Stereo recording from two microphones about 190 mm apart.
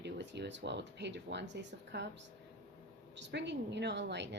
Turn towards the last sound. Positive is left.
turn(degrees=-65)  # may be behind; listen again after turning